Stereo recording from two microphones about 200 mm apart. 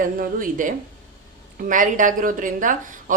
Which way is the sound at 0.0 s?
45° right (ahead or behind).